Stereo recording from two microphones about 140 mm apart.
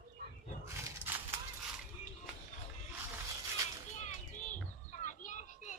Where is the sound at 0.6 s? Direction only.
20° right (ahead or behind).